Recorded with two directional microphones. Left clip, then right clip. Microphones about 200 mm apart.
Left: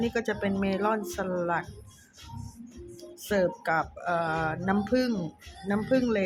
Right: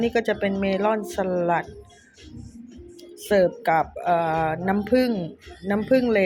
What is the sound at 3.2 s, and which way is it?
Speech, 10° right (ahead or behind).